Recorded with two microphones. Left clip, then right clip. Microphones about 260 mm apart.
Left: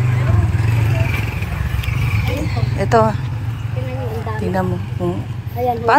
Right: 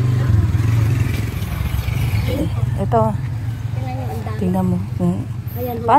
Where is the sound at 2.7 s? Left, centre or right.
Right.